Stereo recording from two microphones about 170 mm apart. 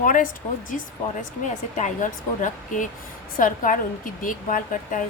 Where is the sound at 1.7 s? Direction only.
45° left (ahead or behind).